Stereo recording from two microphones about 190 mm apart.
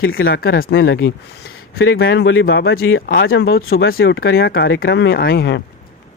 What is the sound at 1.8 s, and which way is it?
Speech, 65° left (ahead or behind).